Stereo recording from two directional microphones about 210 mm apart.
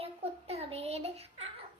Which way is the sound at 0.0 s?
30° right (ahead or behind).